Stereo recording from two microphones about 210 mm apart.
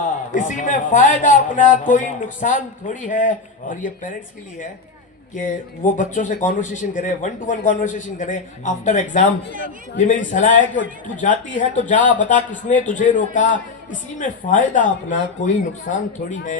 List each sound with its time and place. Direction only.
0.0 s a man's voice: 40° left (ahead or behind)
5.3 s a man's voice: 40° left (ahead or behind)